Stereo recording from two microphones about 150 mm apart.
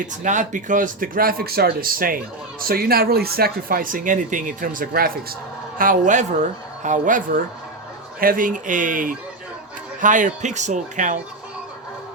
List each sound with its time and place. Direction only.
0.0 s speech: 55° right (ahead or behind); by 5.2 s 80° right
5.7 s speech: 65° right (ahead or behind)